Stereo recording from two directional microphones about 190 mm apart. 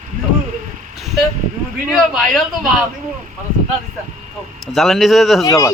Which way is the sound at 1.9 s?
Centre (ahead or behind).